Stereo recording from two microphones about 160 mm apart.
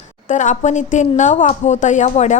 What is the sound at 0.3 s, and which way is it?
A woman's voice, 50° left (ahead or behind).